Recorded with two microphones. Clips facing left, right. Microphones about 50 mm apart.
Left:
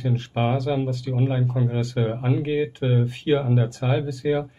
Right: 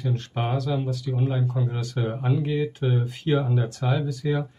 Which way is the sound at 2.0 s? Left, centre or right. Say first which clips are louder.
Left 1 dB; centre.